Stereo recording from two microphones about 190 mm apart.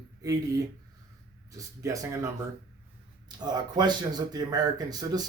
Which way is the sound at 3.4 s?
20° right (ahead or behind).